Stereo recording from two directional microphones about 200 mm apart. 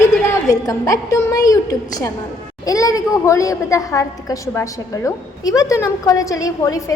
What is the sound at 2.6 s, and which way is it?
A woman's voice, 15° left (ahead or behind).